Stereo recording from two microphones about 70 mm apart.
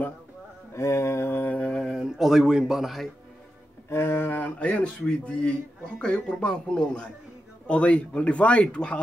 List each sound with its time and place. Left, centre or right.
0.7 s mantra: left
1.5 s mantra: centre
2.0 s speech: centre
3.9 s speech: left; by 9.0 s centre